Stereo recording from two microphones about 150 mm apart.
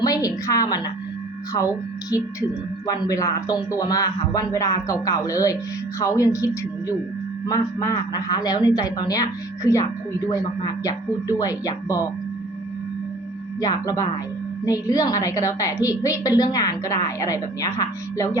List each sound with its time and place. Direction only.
0.0 s a sound: 25° left (ahead or behind)
1.5 s a woman's voice: 25° left (ahead or behind)
13.6 s a woman's voice: 25° left (ahead or behind)